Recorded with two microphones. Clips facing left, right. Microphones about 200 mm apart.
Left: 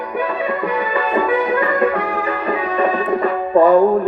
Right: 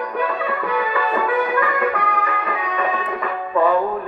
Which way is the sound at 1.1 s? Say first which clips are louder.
Left 4 dB; 25° left (ahead or behind).